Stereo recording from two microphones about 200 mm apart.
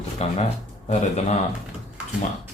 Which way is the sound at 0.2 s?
35° left (ahead or behind).